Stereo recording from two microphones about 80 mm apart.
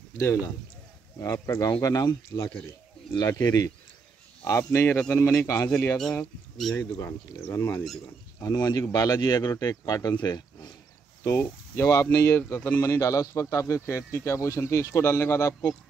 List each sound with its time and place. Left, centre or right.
0.2 s speech: left
4.5 s speech: left
5.3 s speech: left
6.6 s speech: centre
7.0 s speech: left
8.4 s speech: left
11.2 s speech: left